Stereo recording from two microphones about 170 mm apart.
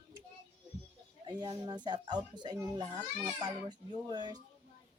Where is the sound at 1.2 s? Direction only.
25° right (ahead or behind).